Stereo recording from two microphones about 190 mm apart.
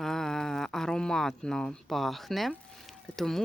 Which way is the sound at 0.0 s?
Centre (ahead or behind).